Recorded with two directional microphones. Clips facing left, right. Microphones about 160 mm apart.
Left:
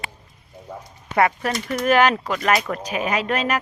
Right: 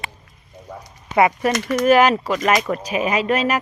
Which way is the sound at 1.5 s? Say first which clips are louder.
Right 5 dB; 90° right.